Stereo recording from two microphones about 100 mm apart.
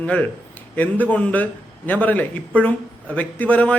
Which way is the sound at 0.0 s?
15° left (ahead or behind).